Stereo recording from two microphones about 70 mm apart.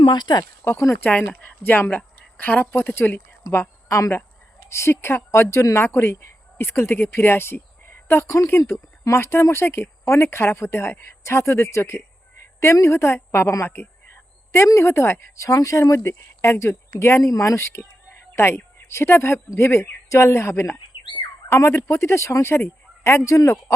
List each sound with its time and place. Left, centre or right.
0.1 s speech: left
0.6 s speech: left
2.7 s speech: left
3.8 s speech: left
18.3 s speech: left